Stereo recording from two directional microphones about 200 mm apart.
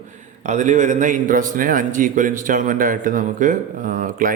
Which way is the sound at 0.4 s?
35° right (ahead or behind).